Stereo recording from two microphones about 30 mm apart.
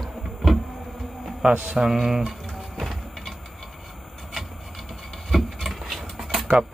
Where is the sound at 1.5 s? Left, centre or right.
Right.